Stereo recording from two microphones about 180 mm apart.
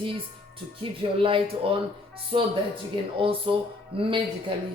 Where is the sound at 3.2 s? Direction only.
30° right (ahead or behind).